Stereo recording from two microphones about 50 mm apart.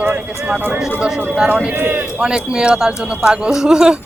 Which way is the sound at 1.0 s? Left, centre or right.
Right.